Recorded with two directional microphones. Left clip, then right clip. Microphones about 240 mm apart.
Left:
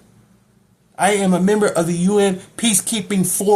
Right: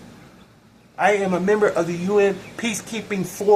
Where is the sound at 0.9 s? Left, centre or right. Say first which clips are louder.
Left 2 dB; left.